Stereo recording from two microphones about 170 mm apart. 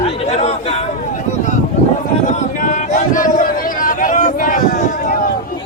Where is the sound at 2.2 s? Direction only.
50° left (ahead or behind).